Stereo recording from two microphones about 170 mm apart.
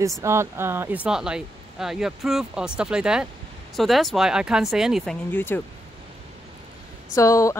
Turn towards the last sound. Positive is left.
turn(degrees=20)  # may be behind; listen again after turning